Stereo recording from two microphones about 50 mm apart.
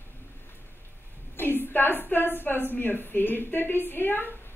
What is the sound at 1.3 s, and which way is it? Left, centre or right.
A woman's voice, left.